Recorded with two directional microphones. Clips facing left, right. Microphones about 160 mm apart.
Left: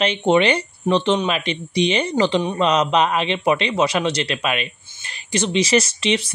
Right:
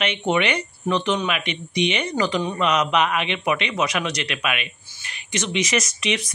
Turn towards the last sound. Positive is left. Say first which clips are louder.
# left 4 dB
turn(degrees=30)  # may be behind; listen again after turning